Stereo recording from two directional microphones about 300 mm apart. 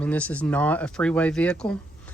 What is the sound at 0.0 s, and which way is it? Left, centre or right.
Speech, centre.